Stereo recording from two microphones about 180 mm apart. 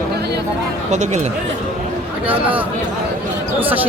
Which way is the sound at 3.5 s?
10° right (ahead or behind).